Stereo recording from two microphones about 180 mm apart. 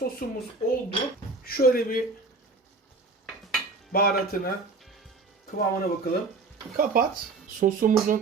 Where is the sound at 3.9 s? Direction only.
55° left (ahead or behind).